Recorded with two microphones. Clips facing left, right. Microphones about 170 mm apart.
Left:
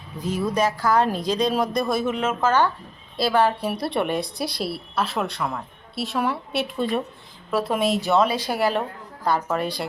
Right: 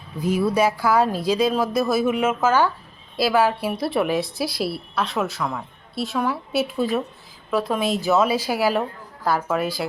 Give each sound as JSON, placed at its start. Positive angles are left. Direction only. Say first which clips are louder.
{"t": 0.2, "sound": "a woman's voice", "louder": "right 3 dB", "side_deg": -10}